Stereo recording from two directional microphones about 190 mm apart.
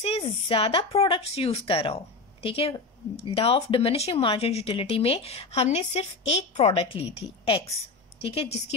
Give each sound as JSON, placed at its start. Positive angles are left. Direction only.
{"t": 0.0, "sound": "a woman's voice", "side_deg": 30}